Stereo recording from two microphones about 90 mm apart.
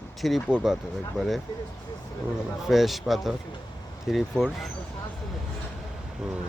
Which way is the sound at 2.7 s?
Centre (ahead or behind).